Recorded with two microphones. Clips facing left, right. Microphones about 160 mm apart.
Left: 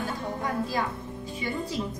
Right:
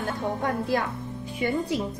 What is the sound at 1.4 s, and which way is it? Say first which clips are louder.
Speech: right 6 dB; 55° right (ahead or behind).